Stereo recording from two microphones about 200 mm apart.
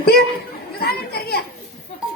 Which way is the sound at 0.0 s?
50° left (ahead or behind).